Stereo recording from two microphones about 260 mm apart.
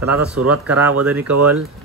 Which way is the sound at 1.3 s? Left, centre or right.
Right.